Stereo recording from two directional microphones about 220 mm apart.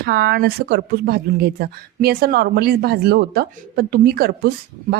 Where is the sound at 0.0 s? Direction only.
45° right (ahead or behind).